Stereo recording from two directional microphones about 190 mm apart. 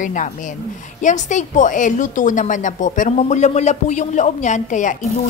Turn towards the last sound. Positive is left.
turn(degrees=40)  # may be behind; listen again after turning